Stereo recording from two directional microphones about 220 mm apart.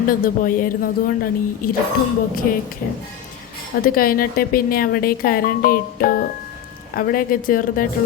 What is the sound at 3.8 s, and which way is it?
A woman's voice, 40° left (ahead or behind).